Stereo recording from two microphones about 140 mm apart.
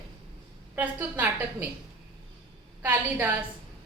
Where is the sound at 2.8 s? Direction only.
15° right (ahead or behind).